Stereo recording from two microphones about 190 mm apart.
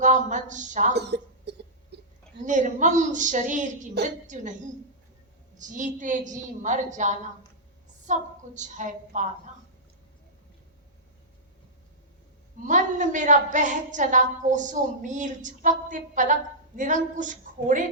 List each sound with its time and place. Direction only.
0.0 s a woman's voice: 40° right (ahead or behind)
0.9 s cough: 60° right (ahead or behind)
2.4 s a woman's voice: 40° right (ahead or behind)
12.6 s a woman's voice: 40° right (ahead or behind)